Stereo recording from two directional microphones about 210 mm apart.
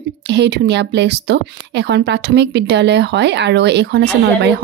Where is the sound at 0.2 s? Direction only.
55° right (ahead or behind).